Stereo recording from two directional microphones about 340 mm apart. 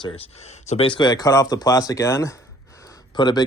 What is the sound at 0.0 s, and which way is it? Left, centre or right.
Speech, centre.